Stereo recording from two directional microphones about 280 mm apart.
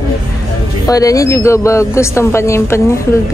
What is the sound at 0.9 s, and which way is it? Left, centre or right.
Speech, centre.